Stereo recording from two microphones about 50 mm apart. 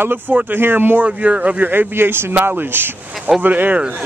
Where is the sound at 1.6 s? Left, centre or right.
Right.